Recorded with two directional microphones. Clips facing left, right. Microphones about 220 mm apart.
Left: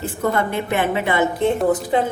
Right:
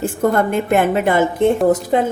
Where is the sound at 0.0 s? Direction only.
45° right (ahead or behind).